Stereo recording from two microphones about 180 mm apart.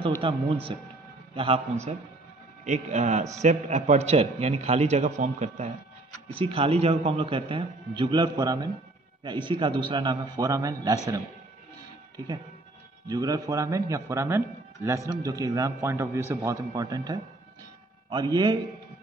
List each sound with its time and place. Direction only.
0.2 s a man's voice: 30° right (ahead or behind)
2.6 s a man's voice: 40° right (ahead or behind)
6.2 s a man's voice: 30° right (ahead or behind)
13.0 s a man's voice: 20° right (ahead or behind)